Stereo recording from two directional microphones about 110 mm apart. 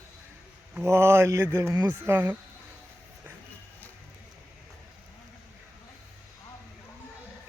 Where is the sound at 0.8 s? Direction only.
25° right (ahead or behind).